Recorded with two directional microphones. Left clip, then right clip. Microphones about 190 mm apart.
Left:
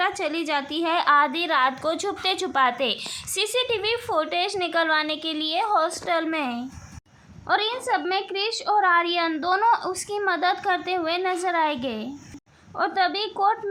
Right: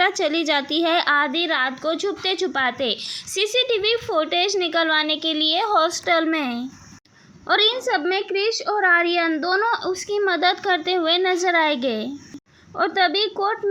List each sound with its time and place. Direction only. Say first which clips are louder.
0.0 s a woman's voice: right 5 dB; 15° right (ahead or behind)